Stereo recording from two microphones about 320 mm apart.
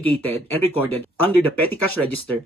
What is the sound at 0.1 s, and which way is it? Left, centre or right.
Speech, centre.